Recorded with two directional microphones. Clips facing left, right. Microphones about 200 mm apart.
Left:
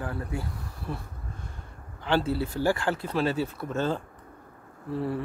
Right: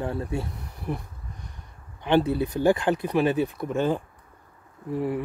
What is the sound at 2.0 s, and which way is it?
Speech, 20° right (ahead or behind).